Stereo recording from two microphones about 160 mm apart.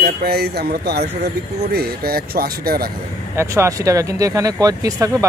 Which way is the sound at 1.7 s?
75° right (ahead or behind).